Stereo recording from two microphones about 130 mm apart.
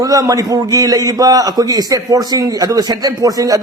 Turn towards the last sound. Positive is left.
turn(degrees=-25)  # may be behind; listen again after turning